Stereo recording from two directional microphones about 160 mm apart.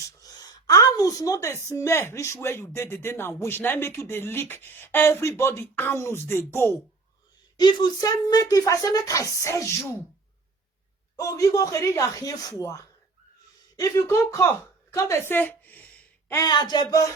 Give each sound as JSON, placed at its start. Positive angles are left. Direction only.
{"t": 0.2, "sound": "a woman's voice", "side_deg": 25}
{"t": 7.5, "sound": "speech", "side_deg": 25}
{"t": 11.2, "sound": "speech", "side_deg": 20}
{"t": 16.3, "sound": "speech", "side_deg": 25}